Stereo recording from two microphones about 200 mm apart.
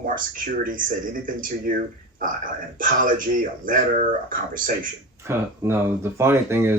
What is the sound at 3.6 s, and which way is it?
Speech, 45° right (ahead or behind).